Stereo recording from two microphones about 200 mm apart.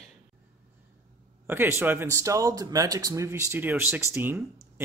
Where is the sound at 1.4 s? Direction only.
10° right (ahead or behind).